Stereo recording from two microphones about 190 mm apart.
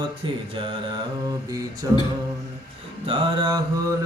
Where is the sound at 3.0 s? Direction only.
25° right (ahead or behind).